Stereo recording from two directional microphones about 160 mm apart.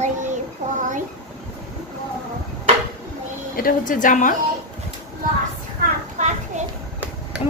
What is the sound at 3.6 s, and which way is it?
Speech, 60° left (ahead or behind).